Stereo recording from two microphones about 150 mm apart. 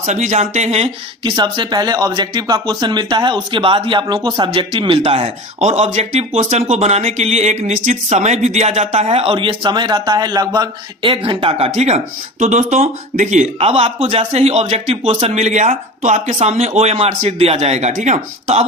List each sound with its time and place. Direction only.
0.0 s speech: 50° right (ahead or behind)
1.2 s speech: 30° right (ahead or behind)
11.7 s speech: 50° right (ahead or behind)